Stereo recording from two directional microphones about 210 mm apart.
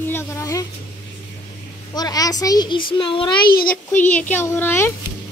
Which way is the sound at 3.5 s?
45° left (ahead or behind).